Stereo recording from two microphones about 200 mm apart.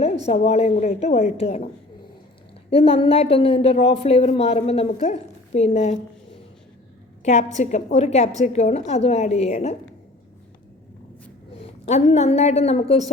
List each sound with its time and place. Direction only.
0.4 s a woman's voice: 30° left (ahead or behind)
11.5 s a woman's voice: 30° left (ahead or behind)